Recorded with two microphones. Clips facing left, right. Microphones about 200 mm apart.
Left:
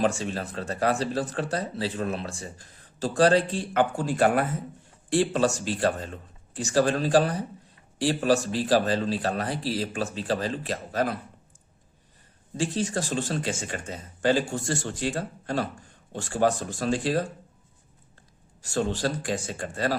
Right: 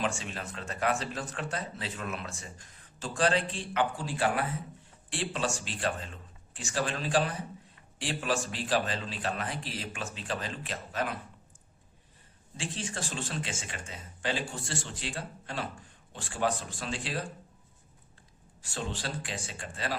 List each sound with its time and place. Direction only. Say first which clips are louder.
0.0 s speech: left 8 dB; 40° left (ahead or behind)
12.5 s speech: left 10 dB; 40° left (ahead or behind)
18.6 s speech: left 10 dB; 45° left (ahead or behind)